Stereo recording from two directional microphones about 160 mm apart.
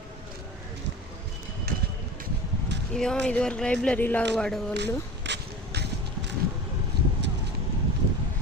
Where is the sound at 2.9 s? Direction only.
5° left (ahead or behind).